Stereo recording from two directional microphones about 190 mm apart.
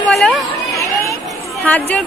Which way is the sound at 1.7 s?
5° left (ahead or behind).